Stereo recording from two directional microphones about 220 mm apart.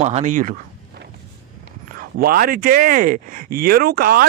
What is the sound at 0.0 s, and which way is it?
Speech, 35° right (ahead or behind).